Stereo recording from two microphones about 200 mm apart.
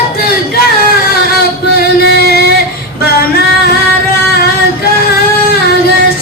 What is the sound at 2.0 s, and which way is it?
Music, 55° left (ahead or behind).